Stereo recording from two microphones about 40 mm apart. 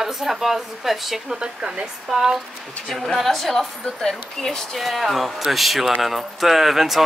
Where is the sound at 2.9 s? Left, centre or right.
Centre.